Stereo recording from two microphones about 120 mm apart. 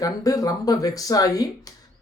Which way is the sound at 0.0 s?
30° left (ahead or behind).